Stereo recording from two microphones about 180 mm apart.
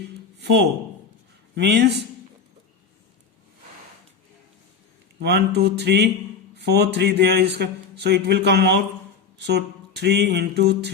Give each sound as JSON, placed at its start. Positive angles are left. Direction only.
{"t": 0.3, "sound": "a sound", "side_deg": -65}
{"t": 1.5, "sound": "speech", "side_deg": -70}
{"t": 5.2, "sound": "speech", "side_deg": -65}